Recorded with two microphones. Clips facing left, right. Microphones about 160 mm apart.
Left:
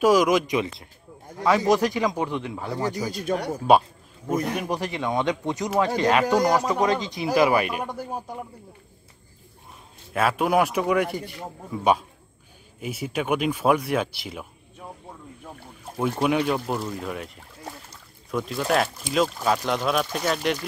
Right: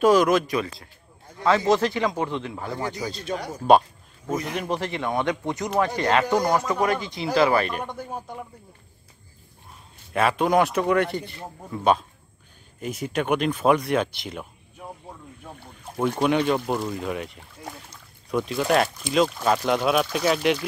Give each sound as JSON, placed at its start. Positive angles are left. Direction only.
{"t": 0.0, "sound": "speech", "side_deg": 10}
{"t": 3.3, "sound": "speech", "side_deg": 60}
{"t": 4.6, "sound": "speech", "side_deg": 15}
{"t": 10.1, "sound": "speech", "side_deg": 5}
{"t": 16.0, "sound": "speech", "side_deg": 5}